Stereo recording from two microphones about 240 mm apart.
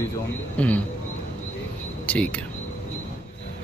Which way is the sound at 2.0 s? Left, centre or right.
Centre.